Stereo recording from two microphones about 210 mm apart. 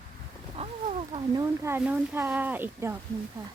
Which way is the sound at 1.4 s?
10° right (ahead or behind).